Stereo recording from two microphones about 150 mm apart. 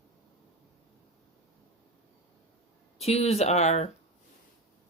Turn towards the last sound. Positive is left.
turn(degrees=50)  # may be behind; listen again after turning